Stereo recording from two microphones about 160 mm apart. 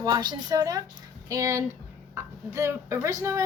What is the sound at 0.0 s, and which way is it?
Speech, 25° right (ahead or behind).